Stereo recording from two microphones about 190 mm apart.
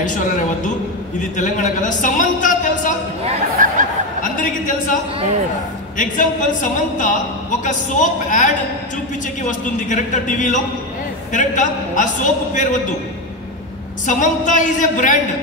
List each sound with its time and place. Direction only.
1.3 s a man's voice: 40° left (ahead or behind)
3.6 s a sound: 45° right (ahead or behind)
4.2 s a woman's voice: 45° left (ahead or behind)
5.9 s a man's voice: 45° left (ahead or behind)
11.3 s a man's voice: 40° left (ahead or behind)
14.0 s a man's voice: 40° left (ahead or behind)